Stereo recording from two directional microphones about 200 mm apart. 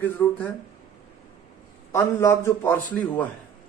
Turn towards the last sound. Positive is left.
turn(degrees=10)  # may be behind; listen again after turning